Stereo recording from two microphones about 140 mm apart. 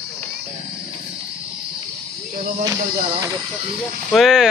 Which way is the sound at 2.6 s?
20° right (ahead or behind).